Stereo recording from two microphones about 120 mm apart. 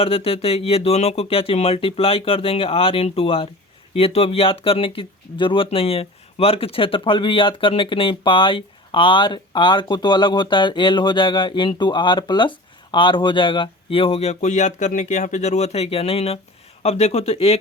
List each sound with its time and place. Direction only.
0.0 s speech: 55° left (ahead or behind)